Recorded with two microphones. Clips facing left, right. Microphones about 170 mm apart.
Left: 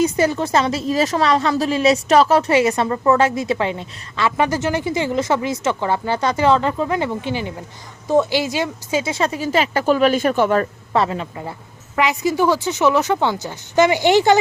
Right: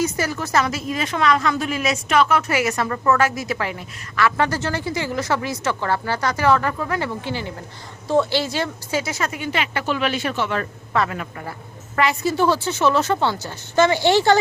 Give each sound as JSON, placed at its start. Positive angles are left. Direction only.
{"t": 0.0, "sound": "a woman's voice", "side_deg": 25}